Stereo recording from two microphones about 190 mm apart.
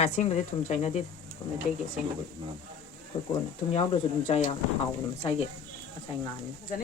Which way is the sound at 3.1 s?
25° left (ahead or behind).